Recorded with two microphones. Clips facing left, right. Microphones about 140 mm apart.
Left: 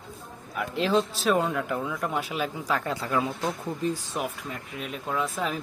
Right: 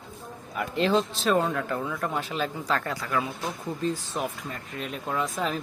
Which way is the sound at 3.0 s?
25° left (ahead or behind).